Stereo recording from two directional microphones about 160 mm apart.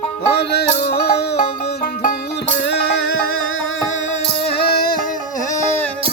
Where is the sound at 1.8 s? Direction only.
65° left (ahead or behind).